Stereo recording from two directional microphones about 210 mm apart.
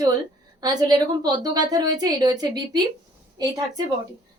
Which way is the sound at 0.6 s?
20° right (ahead or behind).